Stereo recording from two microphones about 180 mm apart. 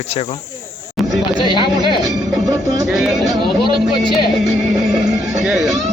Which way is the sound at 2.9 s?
5° right (ahead or behind).